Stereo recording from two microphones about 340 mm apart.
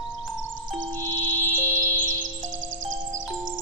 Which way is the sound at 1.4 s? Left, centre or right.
Centre.